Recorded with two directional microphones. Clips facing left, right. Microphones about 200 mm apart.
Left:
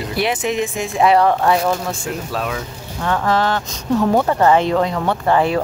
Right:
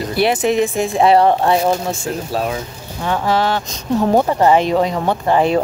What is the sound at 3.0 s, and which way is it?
Speech, 10° right (ahead or behind).